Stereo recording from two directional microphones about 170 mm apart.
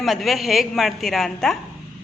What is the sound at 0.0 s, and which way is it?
A woman's voice, centre (ahead or behind).